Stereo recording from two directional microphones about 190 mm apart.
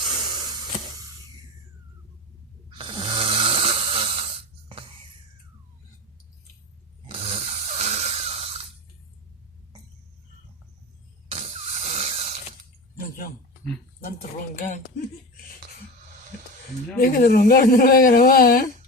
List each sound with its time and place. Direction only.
0.0 s spray: 25° right (ahead or behind)
2.7 s snoring: 25° right (ahead or behind)
7.1 s snoring: 35° right (ahead or behind)
11.3 s a sound: 30° right (ahead or behind)
14.0 s speech: 50° left (ahead or behind)
17.0 s speech: 50° left (ahead or behind)